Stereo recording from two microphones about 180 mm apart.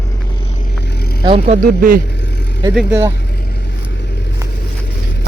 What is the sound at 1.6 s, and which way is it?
Speech, 50° right (ahead or behind).